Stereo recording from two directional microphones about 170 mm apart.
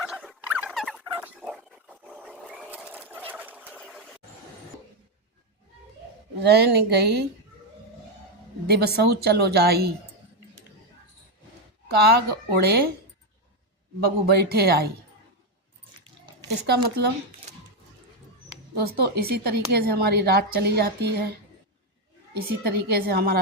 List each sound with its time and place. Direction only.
0.0 s a sound: 5° right (ahead or behind)
1.0 s dog: 10° right (ahead or behind)
2.5 s fowl: 10° right (ahead or behind)
6.4 s speech: 75° right (ahead or behind)
8.6 s a woman's voice: 70° right (ahead or behind)
11.9 s speech: 70° right (ahead or behind)
14.0 s speech: 65° right (ahead or behind)
16.6 s speech: 75° right (ahead or behind)
18.4 s speech: 70° right (ahead or behind)
22.4 s speech: 65° right (ahead or behind)